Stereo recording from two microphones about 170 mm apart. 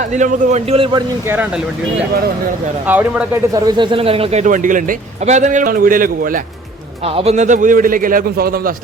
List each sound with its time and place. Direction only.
0.0 s a man's voice: 45° right (ahead or behind); by 1.0 s 30° right (ahead or behind)
1.2 s speech: 10° right (ahead or behind)
2.8 s speech: 10° right (ahead or behind)
3.7 s a man's voice: 30° right (ahead or behind); by 6.4 s 55° right (ahead or behind)
7.0 s a man's voice: 35° right (ahead or behind); by 8.7 s 60° right (ahead or behind)